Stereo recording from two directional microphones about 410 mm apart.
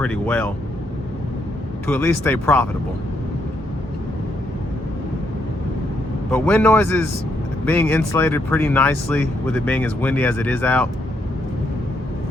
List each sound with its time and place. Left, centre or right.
0.0 s speech: centre
1.9 s speech: centre
6.3 s speech: centre